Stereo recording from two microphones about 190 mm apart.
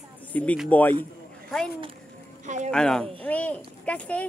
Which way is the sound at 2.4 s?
40° right (ahead or behind).